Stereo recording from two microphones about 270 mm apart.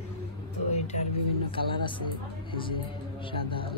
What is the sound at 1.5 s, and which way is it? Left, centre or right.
Speech, centre.